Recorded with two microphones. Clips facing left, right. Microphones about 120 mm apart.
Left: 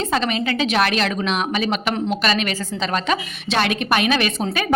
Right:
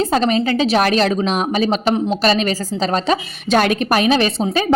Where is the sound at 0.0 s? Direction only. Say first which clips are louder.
Right 5 dB; 40° right (ahead or behind).